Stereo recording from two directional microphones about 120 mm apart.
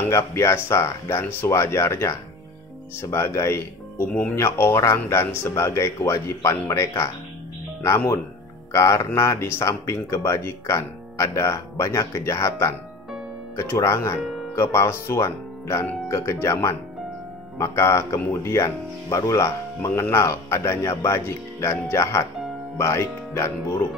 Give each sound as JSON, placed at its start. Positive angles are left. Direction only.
{"t": 0.0, "sound": "speech", "side_deg": 20}